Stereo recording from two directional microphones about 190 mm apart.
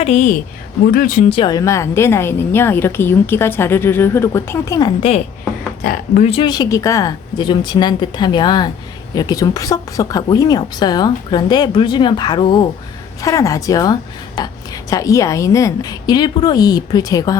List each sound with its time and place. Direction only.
0.0 s speech: 40° left (ahead or behind)
1.3 s a woman's voice: 25° left (ahead or behind)
5.8 s speech: 50° left (ahead or behind)
6.2 s a woman's voice: 25° left (ahead or behind)